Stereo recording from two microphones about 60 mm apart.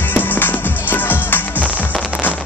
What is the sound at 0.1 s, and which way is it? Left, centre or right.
Music, left.